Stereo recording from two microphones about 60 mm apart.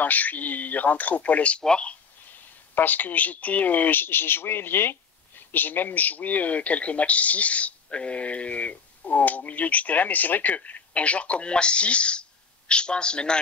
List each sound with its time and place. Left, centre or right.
0.0 s speech: left
2.7 s speech: left; by 13.4 s centre